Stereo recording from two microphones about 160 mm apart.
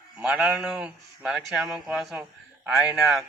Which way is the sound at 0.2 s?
5° right (ahead or behind).